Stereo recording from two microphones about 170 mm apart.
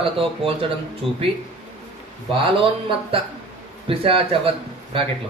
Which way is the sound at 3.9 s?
30° right (ahead or behind).